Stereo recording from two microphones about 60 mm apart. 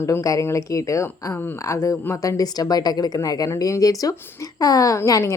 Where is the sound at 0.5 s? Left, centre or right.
Left.